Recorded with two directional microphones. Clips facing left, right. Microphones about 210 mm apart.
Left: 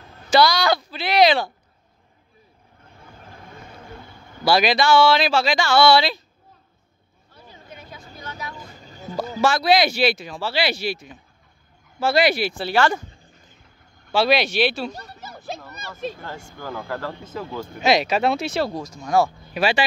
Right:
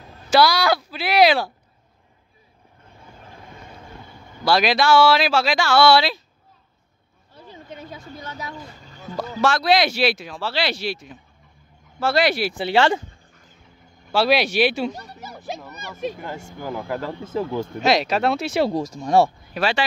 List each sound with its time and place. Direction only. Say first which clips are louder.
0.3 s speech: even; 5° right (ahead or behind)
4.5 s speech: even; centre (ahead or behind)
7.7 s vehicle: right 5 dB; 25° right (ahead or behind)
9.4 s speech: even; centre (ahead or behind)
12.5 s speech: right 2 dB; 25° right (ahead or behind)
14.0 s a child's voice: even; 5° right (ahead or behind)
17.7 s speech: left 1 dB; centre (ahead or behind)
19.0 s speech: right 2 dB; 30° right (ahead or behind)
19.5 s speech: left 1 dB; 10° left (ahead or behind)